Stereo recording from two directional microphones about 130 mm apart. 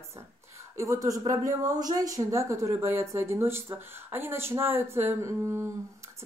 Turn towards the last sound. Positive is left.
turn(degrees=-20)  # may be behind; listen again after turning